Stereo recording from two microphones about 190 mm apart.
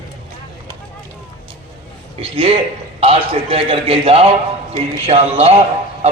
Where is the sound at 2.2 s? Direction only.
30° right (ahead or behind).